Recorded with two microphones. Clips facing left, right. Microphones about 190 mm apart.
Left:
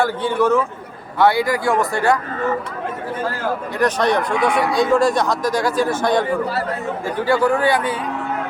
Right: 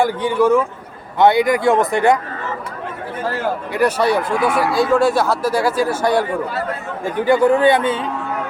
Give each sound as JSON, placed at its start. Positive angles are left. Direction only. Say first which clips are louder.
{"t": 0.0, "sound": "speech", "louder": "right 2 dB", "side_deg": -15}
{"t": 3.8, "sound": "speech", "louder": "right 2 dB", "side_deg": -10}
{"t": 7.0, "sound": "speech", "louder": "right 4 dB", "side_deg": -20}